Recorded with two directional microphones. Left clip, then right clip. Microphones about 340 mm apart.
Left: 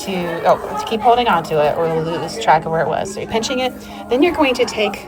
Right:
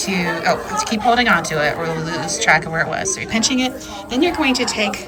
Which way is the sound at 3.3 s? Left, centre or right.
Centre.